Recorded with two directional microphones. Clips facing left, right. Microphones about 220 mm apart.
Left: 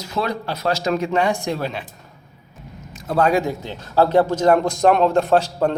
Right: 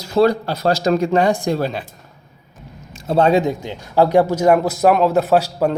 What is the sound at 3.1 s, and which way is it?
A man's voice, 25° right (ahead or behind).